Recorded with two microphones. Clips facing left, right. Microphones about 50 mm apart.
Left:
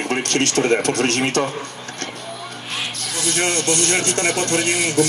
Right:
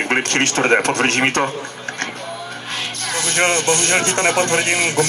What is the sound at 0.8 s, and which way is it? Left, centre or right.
Speech, right.